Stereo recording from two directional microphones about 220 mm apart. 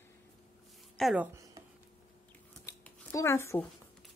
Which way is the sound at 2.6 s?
10° left (ahead or behind).